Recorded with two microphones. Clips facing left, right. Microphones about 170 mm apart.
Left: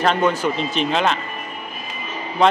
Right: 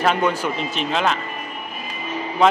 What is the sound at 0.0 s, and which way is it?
A man's voice, 10° right (ahead or behind).